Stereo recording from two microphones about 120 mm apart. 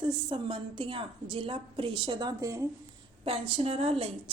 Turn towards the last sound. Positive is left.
turn(degrees=-55)  # may be behind; listen again after turning